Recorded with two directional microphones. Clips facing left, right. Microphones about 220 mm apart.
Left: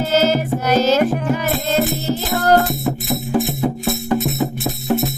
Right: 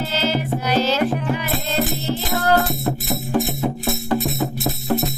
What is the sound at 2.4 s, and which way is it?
Music, 40° left (ahead or behind).